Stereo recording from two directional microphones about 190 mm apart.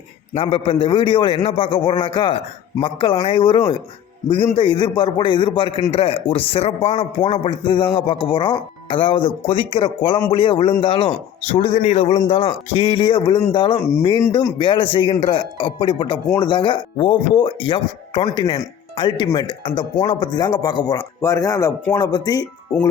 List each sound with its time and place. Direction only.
0.3 s speech: 30° left (ahead or behind)